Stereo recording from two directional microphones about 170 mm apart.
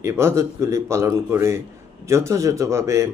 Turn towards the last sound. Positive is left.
turn(degrees=-15)  # may be behind; listen again after turning